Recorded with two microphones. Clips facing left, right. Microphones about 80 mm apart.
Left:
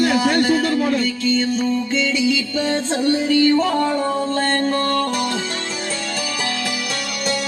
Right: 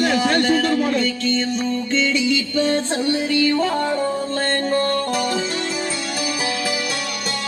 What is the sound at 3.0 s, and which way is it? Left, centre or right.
Music, right.